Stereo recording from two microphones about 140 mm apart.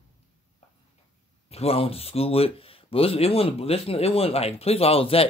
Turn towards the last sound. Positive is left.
turn(degrees=45)  # may be behind; listen again after turning